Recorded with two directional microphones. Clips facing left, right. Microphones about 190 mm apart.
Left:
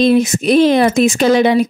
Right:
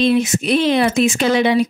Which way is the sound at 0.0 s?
40° left (ahead or behind).